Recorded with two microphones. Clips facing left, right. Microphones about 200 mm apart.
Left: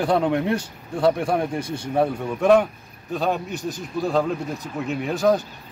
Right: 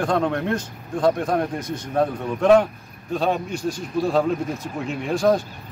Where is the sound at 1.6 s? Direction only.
30° left (ahead or behind).